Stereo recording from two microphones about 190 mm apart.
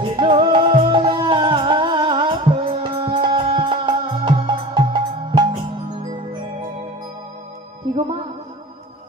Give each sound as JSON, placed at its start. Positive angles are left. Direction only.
{"t": 0.0, "sound": "music", "side_deg": -25}